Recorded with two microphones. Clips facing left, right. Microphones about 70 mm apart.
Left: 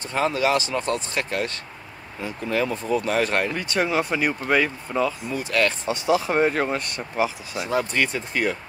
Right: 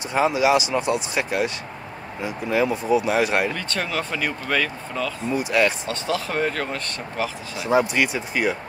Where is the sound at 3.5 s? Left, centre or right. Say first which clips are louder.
Left 3 dB; centre.